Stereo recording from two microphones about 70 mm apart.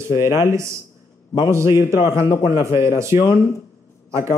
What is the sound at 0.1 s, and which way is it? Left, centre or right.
A man's voice, right.